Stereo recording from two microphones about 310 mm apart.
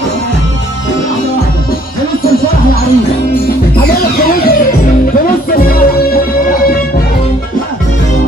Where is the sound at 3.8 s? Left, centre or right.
Left.